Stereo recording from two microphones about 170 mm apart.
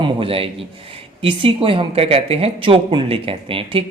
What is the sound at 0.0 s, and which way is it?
A woman's voice, 30° right (ahead or behind).